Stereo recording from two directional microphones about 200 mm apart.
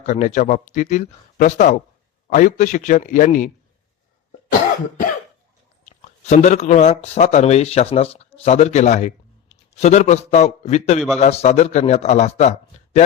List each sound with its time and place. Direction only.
0.0 s a man's voice: 35° left (ahead or behind)
5.8 s a man's voice: 35° left (ahead or behind)